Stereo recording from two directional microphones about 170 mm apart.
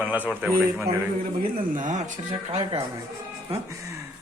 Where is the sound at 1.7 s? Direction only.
50° right (ahead or behind).